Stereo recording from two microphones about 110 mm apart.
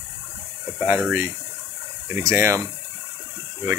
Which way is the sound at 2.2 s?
25° right (ahead or behind).